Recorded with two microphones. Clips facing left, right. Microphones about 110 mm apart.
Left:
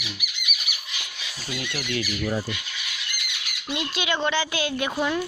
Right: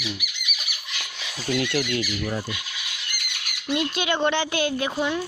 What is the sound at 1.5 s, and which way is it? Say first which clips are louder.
Speech: right 9 dB; 70° right (ahead or behind).